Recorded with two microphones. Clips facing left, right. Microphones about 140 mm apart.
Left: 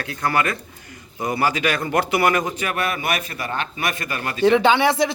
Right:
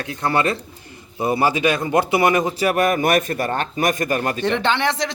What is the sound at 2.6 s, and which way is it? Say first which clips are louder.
A man's voice: right 7 dB; 40° right (ahead or behind).